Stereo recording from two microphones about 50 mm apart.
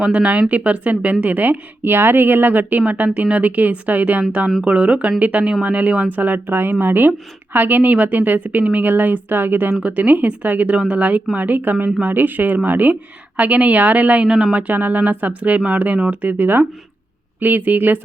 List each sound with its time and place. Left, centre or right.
0.0 s a woman's voice: right
4.2 s a woman's voice: right
9.8 s a woman's voice: right
14.3 s speech: centre
14.5 s a woman's voice: right